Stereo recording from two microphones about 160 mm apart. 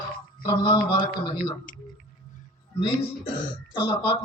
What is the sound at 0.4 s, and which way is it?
Speech, 30° left (ahead or behind).